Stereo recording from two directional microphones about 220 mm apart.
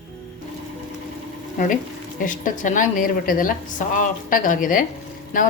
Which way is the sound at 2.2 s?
35° left (ahead or behind).